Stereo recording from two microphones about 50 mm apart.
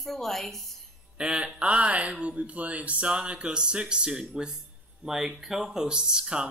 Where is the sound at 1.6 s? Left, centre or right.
Right.